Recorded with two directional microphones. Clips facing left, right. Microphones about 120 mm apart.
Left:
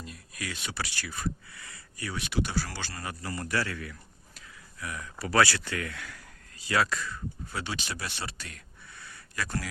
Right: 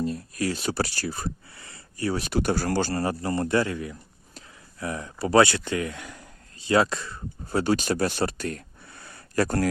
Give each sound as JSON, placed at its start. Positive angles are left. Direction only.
{"t": 0.0, "sound": "speech", "side_deg": -35}
{"t": 4.4, "sound": "speech", "side_deg": -30}